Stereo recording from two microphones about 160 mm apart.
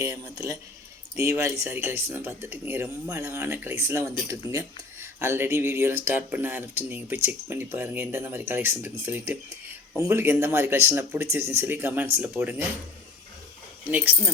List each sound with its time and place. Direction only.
0.0 s speech: 20° right (ahead or behind)
13.8 s speech: 10° right (ahead or behind)